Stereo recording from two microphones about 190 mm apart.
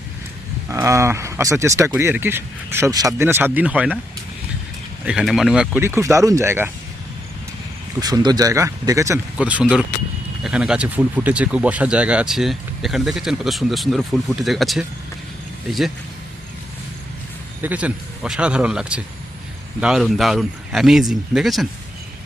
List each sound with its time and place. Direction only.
0.7 s speech: 15° right (ahead or behind)
5.0 s speech: centre (ahead or behind)
8.0 s speech: 20° right (ahead or behind); by 14.8 s centre (ahead or behind)
17.6 s speech: 10° right (ahead or behind)